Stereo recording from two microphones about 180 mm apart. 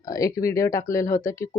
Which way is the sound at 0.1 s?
20° left (ahead or behind).